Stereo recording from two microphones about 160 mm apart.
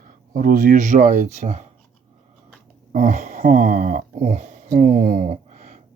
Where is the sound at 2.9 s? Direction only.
55° right (ahead or behind).